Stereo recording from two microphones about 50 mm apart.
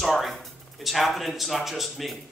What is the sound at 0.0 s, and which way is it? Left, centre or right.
Speech, centre.